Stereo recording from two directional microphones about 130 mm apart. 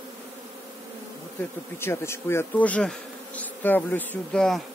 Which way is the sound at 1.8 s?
20° left (ahead or behind).